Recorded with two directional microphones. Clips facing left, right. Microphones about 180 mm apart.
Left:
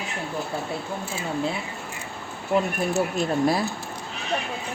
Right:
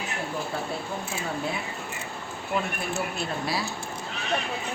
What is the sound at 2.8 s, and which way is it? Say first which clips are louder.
Speech: left 7 dB; 40° left (ahead or behind).